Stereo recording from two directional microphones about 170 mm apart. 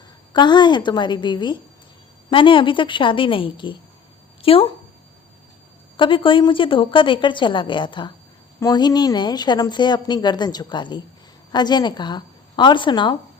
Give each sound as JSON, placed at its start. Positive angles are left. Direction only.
{"t": 0.3, "sound": "a woman's voice", "side_deg": 25}
{"t": 6.0, "sound": "a woman's voice", "side_deg": 30}